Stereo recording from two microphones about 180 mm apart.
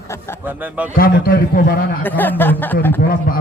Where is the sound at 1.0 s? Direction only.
55° left (ahead or behind).